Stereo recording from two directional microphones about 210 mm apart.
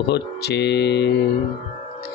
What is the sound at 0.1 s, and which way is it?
Mantra, 50° left (ahead or behind).